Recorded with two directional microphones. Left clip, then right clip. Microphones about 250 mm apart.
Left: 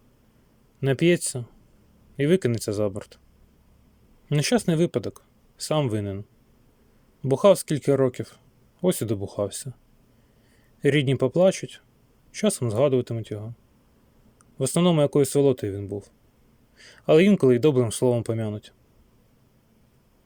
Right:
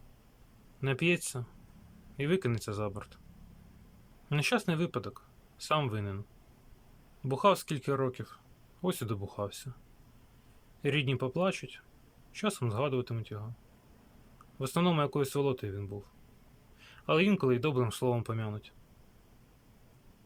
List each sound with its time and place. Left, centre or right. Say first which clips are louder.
0.8 s speech: left 9 dB; left
4.3 s speech: left 7 dB; left
7.3 s speech: left 9 dB; left
10.8 s speech: left 10 dB; left
14.6 s speech: left 9 dB; left